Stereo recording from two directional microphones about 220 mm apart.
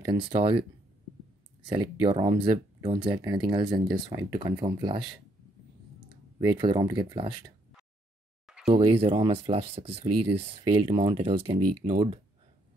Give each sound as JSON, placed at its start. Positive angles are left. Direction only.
{"t": 0.0, "sound": "speech", "side_deg": -25}
{"t": 1.7, "sound": "speech", "side_deg": -20}
{"t": 6.3, "sound": "speech", "side_deg": -20}
{"t": 8.6, "sound": "speech", "side_deg": -25}